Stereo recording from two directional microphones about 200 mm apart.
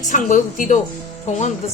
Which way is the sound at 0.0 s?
40° left (ahead or behind).